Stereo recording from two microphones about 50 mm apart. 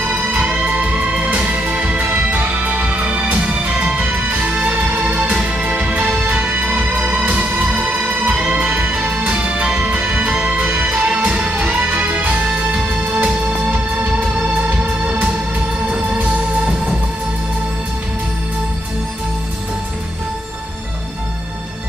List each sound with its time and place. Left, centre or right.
0.3 s music: right
15.9 s music: centre